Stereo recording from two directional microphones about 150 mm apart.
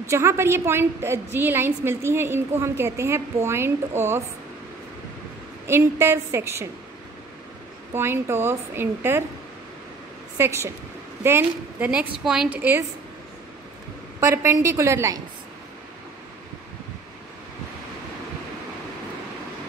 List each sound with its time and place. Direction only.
0.0 s a woman's voice: 20° right (ahead or behind)
5.7 s a woman's voice: 15° right (ahead or behind)
7.9 s a woman's voice: 15° right (ahead or behind)
10.3 s a woman's voice: 15° right (ahead or behind)
14.2 s a woman's voice: 20° right (ahead or behind)